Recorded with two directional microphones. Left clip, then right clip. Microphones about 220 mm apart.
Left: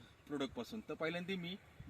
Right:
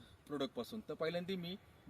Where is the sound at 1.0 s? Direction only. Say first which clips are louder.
Right 1 dB; 30° right (ahead or behind).